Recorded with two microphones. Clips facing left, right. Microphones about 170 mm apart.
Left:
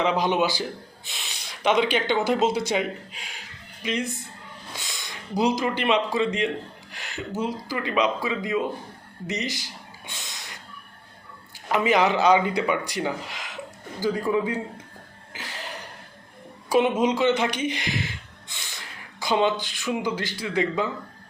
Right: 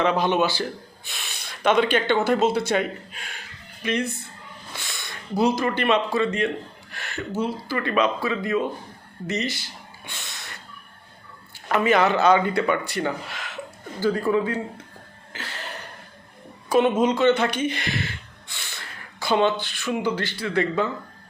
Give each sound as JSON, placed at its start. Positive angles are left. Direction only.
{"t": 0.0, "sound": "speech", "side_deg": 15}
{"t": 3.1, "sound": "speech", "side_deg": -55}
{"t": 3.8, "sound": "speech", "side_deg": 15}
{"t": 4.8, "sound": "a sound", "side_deg": 15}
{"t": 5.8, "sound": "speech", "side_deg": 15}
{"t": 10.1, "sound": "snort", "side_deg": 15}
{"t": 11.7, "sound": "speech", "side_deg": 15}
{"t": 15.3, "sound": "a sound", "side_deg": 15}
{"t": 16.6, "sound": "speech", "side_deg": 10}